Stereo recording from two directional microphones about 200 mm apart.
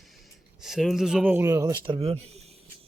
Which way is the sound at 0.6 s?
Centre (ahead or behind).